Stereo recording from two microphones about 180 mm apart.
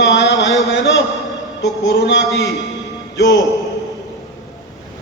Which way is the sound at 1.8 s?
80° left.